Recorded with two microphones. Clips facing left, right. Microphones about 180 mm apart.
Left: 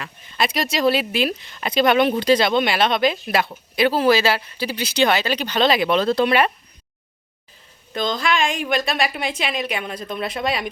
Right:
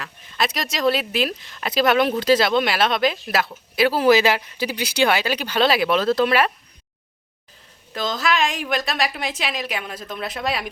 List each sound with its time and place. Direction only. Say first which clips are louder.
0.0 s speech: left 1 dB; centre (ahead or behind)
7.9 s speech: left 1 dB; 5° right (ahead or behind)